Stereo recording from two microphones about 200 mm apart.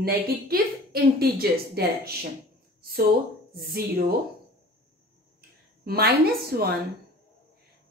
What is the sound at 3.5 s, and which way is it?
Speech, 50° right (ahead or behind).